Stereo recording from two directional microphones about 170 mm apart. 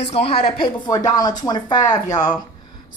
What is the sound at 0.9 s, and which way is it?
Speech, 20° left (ahead or behind).